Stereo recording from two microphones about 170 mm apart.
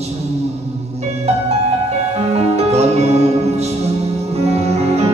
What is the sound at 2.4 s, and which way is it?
Music, 40° right (ahead or behind).